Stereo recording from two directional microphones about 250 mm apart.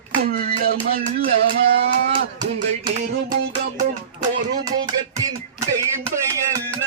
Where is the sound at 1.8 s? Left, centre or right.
Right.